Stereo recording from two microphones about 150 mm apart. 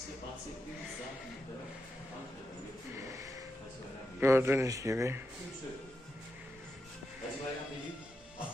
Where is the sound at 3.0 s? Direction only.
20° right (ahead or behind).